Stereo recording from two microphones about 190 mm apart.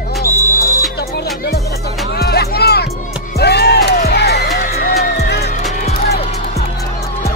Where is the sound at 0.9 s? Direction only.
60° left (ahead or behind).